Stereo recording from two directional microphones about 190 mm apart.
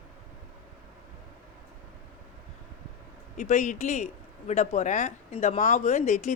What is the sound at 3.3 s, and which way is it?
Speech, 35° left (ahead or behind).